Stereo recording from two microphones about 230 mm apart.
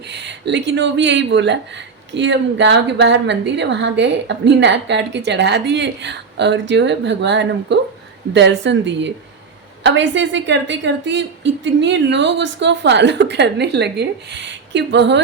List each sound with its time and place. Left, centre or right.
0.1 s speech: right